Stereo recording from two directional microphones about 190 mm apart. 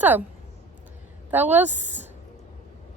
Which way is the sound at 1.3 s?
10° right (ahead or behind).